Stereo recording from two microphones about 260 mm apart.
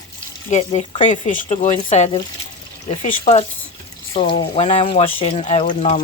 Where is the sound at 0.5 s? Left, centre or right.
Left.